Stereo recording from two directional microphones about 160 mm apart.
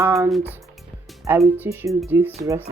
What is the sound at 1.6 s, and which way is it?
Speech, 20° right (ahead or behind).